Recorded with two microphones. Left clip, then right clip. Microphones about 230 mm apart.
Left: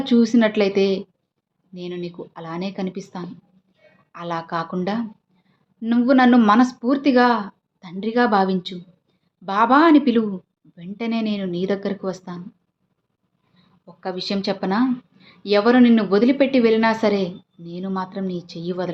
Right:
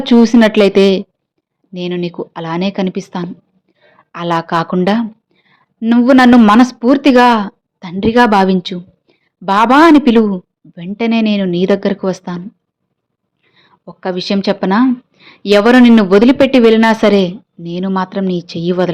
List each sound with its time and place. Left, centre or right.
0.0 s a woman's voice: right
13.5 s speech: right